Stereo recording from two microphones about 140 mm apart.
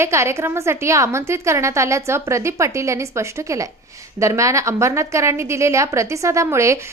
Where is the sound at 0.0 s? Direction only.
20° right (ahead or behind).